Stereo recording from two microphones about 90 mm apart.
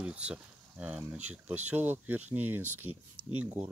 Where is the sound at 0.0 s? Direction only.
15° right (ahead or behind).